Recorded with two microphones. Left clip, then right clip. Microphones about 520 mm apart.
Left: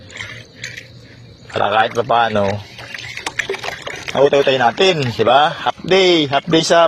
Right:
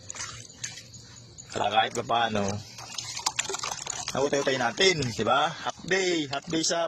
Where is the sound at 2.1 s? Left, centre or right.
Right.